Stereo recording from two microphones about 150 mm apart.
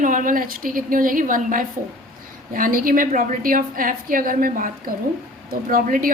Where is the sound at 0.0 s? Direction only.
60° right (ahead or behind).